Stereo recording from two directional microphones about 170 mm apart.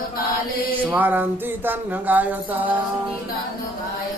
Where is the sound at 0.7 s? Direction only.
10° right (ahead or behind).